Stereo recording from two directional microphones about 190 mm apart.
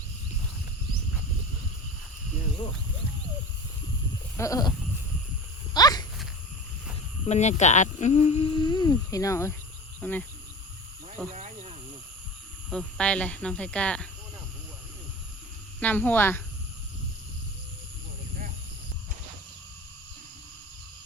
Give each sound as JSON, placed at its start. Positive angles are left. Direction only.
{"t": 4.4, "sound": "speech", "side_deg": 20}
{"t": 5.7, "sound": "a sound", "side_deg": 20}
{"t": 7.3, "sound": "speech", "side_deg": 35}
{"t": 11.3, "sound": "speech", "side_deg": -35}
{"t": 12.7, "sound": "speech", "side_deg": 5}
{"t": 15.8, "sound": "speech", "side_deg": 10}